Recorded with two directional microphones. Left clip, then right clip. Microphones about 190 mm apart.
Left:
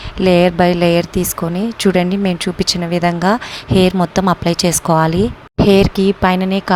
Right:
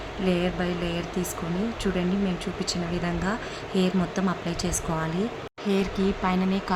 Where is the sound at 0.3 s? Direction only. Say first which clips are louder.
Left 16 dB; 50° left (ahead or behind).